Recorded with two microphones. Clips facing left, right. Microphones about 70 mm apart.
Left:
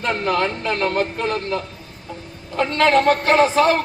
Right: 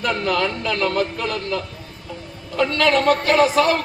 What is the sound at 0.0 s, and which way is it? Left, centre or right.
A man's voice, left.